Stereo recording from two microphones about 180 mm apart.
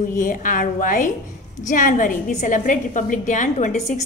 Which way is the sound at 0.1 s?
50° left (ahead or behind).